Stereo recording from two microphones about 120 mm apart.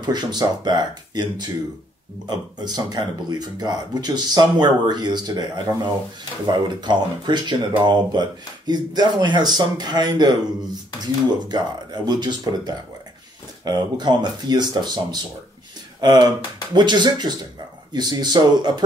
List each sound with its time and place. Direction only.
0.0 s speech: 35° right (ahead or behind)
11.4 s speech: 35° right (ahead or behind)